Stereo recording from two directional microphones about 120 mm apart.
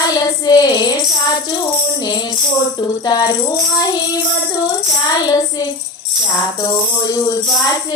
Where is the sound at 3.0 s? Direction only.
35° left (ahead or behind).